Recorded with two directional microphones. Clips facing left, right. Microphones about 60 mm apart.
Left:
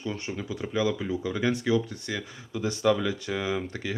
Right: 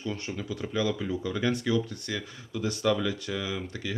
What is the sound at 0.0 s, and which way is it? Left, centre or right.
Speech, centre.